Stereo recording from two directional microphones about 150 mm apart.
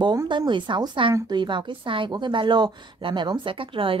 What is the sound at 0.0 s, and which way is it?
Speech, 30° right (ahead or behind).